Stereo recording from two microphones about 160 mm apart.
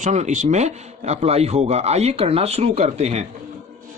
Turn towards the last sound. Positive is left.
turn(degrees=-40)  # may be behind; listen again after turning